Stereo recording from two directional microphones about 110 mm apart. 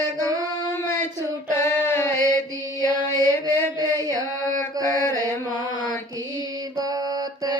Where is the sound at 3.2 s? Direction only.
35° right (ahead or behind).